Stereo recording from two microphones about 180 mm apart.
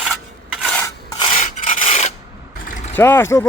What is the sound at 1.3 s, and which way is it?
Filing, 35° left (ahead or behind).